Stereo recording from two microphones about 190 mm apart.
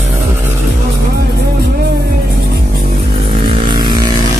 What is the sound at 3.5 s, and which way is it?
Vehicle, 25° right (ahead or behind).